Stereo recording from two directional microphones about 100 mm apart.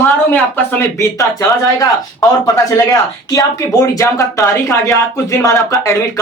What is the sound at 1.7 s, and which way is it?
Speech, 35° left (ahead or behind).